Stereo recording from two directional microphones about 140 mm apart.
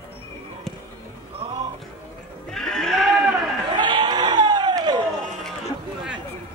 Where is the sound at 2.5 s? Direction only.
5° left (ahead or behind).